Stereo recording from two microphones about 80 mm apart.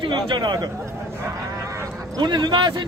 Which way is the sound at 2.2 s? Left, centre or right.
Right.